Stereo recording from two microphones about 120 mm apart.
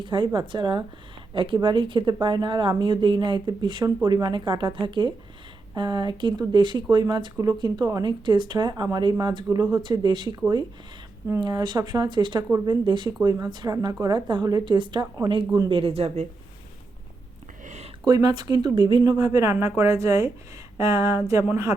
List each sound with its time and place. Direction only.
0.0 s a woman's voice: 40° right (ahead or behind)
11.3 s speech: 35° right (ahead or behind)
15.7 s speech: 55° right (ahead or behind)
18.0 s speech: 35° right (ahead or behind)